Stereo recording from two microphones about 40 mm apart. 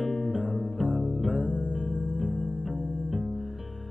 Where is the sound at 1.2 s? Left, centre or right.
Right.